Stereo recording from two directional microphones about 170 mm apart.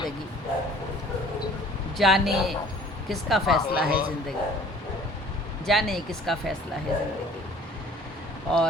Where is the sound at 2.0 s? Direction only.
Centre (ahead or behind).